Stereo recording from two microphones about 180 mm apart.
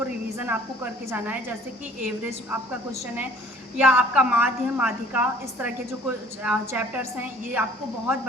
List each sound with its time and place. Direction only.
0.3 s a woman's voice: 10° right (ahead or behind)